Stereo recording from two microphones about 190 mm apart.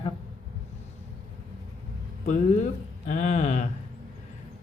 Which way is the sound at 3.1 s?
40° left (ahead or behind).